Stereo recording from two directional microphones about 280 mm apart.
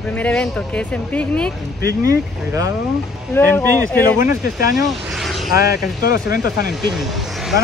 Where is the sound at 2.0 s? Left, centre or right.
Centre.